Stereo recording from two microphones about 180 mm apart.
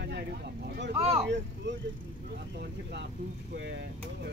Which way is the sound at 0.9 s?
30° right (ahead or behind).